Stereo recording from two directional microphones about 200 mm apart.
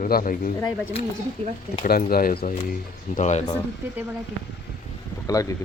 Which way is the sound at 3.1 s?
35° left (ahead or behind).